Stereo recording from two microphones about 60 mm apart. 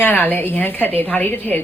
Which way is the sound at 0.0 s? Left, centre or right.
Left.